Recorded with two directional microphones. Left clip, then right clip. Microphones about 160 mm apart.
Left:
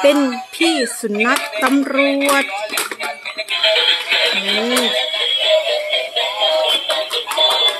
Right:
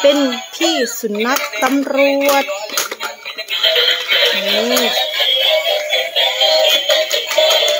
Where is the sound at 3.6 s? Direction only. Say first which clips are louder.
Right 1 dB; 10° left (ahead or behind).